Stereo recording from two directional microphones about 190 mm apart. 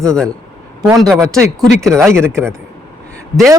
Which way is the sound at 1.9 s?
15° right (ahead or behind).